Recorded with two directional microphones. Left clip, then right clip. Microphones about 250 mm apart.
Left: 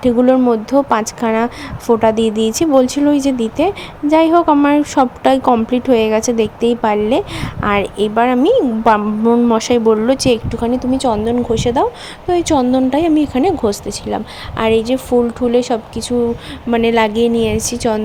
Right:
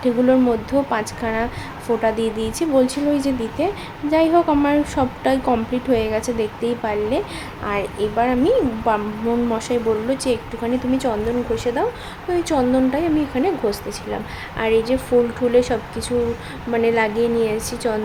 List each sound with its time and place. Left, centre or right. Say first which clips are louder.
0.0 s a woman's voice: left 5 dB; left